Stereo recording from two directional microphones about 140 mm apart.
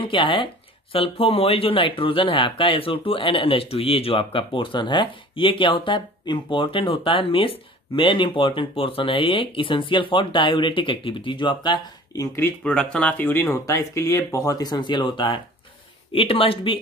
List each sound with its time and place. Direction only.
0.0 s speech: 35° left (ahead or behind); by 12.5 s 20° left (ahead or behind)
12.6 s speech: 5° left (ahead or behind); by 16.8 s 40° left (ahead or behind)